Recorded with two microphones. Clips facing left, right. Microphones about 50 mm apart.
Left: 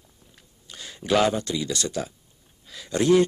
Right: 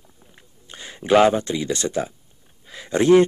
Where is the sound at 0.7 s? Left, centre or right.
Right.